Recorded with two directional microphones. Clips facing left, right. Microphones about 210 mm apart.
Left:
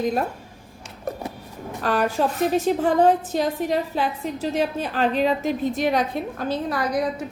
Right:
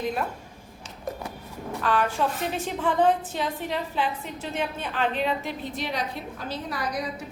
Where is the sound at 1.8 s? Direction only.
40° left (ahead or behind).